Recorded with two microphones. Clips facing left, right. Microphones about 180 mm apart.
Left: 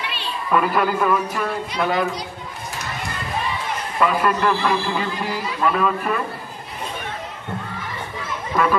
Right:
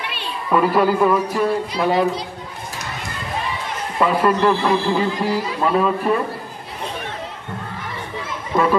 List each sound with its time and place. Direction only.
0.0 s a sound: 55° right (ahead or behind)
0.5 s a man's voice: 30° right (ahead or behind)
4.0 s a man's voice: 30° right (ahead or behind)